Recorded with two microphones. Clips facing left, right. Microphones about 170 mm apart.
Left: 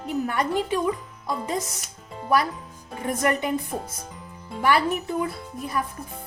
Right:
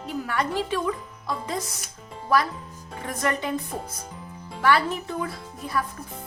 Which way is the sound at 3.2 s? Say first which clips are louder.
Left 2 dB; 15° left (ahead or behind).